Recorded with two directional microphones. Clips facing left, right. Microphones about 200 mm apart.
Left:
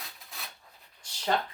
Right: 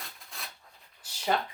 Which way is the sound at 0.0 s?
Centre (ahead or behind).